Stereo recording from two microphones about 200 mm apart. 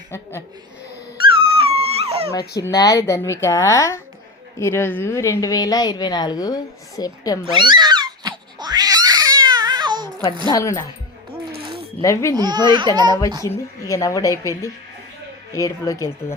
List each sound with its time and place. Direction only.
0.1 s a woman's voice: 10° left (ahead or behind)
1.5 s dog: 30° right (ahead or behind)
2.6 s a woman's voice: 15° left (ahead or behind)
7.5 s cat: 25° right (ahead or behind)
10.5 s a woman's voice: 15° left (ahead or behind)
12.0 s a woman's voice: 15° left (ahead or behind)
12.4 s speech: 20° right (ahead or behind)
13.4 s a woman's voice: 15° left (ahead or behind)